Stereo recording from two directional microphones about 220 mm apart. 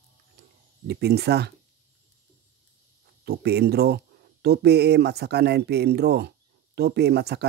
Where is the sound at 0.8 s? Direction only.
50° right (ahead or behind).